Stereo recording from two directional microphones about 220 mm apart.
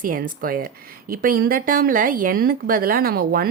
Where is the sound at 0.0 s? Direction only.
40° right (ahead or behind).